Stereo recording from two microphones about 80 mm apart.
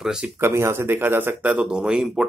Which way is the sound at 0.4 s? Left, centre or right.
Right.